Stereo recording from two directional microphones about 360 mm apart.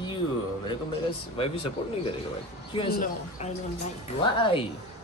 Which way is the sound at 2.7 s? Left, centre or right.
Centre.